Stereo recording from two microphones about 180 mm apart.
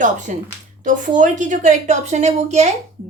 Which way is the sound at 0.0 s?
45° right (ahead or behind).